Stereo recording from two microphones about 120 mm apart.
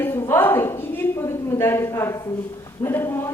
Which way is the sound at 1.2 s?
20° left (ahead or behind).